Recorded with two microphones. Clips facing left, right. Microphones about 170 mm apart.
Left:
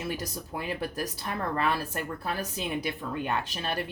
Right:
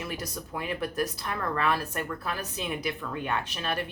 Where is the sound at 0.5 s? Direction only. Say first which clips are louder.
Right 2 dB; 35° left (ahead or behind).